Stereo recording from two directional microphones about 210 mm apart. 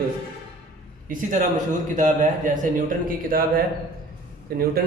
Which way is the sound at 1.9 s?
35° right (ahead or behind).